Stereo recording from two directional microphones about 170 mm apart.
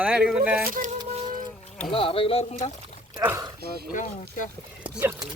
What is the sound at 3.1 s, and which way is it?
Speech, 15° right (ahead or behind).